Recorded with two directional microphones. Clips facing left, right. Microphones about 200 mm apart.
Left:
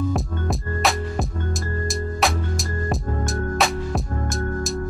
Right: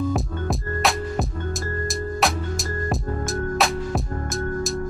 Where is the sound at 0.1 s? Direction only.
Centre (ahead or behind).